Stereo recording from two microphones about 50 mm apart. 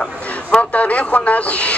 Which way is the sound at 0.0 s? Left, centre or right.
Left.